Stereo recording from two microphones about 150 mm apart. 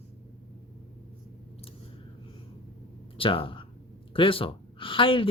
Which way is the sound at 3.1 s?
35° left (ahead or behind).